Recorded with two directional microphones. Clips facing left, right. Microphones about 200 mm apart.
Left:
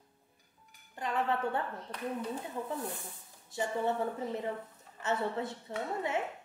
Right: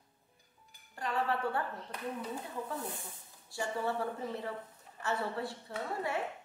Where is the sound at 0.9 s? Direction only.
20° left (ahead or behind).